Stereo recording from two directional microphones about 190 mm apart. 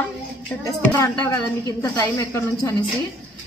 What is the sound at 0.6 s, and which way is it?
Speech, 15° left (ahead or behind).